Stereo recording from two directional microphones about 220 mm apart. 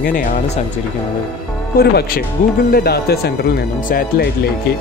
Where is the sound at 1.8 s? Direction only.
45° left (ahead or behind).